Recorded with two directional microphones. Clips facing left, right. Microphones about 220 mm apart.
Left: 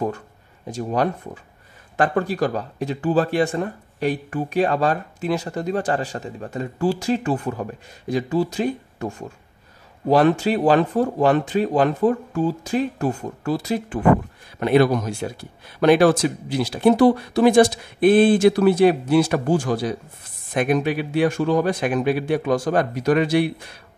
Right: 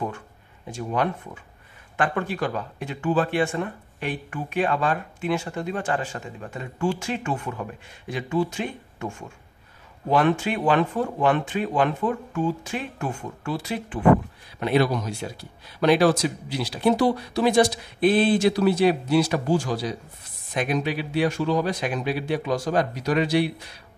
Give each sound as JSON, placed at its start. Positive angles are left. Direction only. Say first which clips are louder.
{"t": 0.7, "sound": "speech", "louder": "left 4 dB", "side_deg": 40}